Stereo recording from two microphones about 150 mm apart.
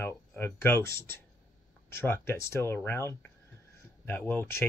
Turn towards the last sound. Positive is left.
turn(degrees=15)  # may be behind; listen again after turning